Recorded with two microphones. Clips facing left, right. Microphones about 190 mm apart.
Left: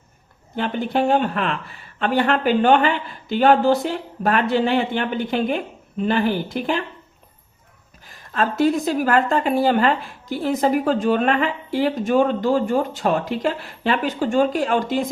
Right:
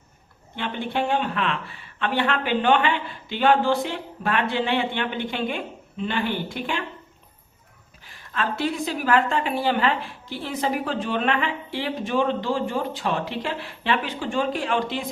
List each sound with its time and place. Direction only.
0.5 s speech: 40° left (ahead or behind)
8.0 s a woman's voice: 40° left (ahead or behind)